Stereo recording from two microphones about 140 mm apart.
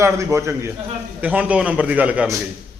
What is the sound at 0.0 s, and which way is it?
Speech, 20° right (ahead or behind).